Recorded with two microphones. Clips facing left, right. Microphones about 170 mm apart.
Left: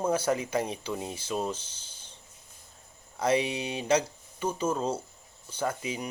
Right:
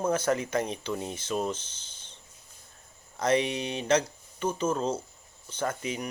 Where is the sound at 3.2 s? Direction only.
10° left (ahead or behind).